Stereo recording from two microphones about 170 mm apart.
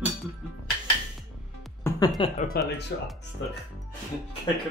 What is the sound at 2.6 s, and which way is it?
Speech, 60° left (ahead or behind).